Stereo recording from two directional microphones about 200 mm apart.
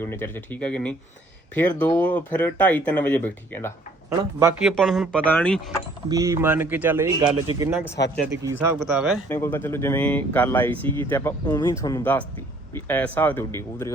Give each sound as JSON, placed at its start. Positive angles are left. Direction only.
{"t": 0.0, "sound": "speech", "side_deg": 10}
{"t": 6.1, "sound": "speech", "side_deg": -15}
{"t": 8.0, "sound": "speech", "side_deg": 55}
{"t": 8.4, "sound": "speech", "side_deg": -15}
{"t": 8.8, "sound": "speech", "side_deg": 0}
{"t": 9.3, "sound": "speech", "side_deg": 10}